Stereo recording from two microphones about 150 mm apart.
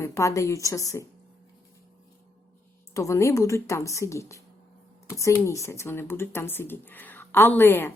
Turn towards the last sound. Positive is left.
turn(degrees=15)  # may be behind; listen again after turning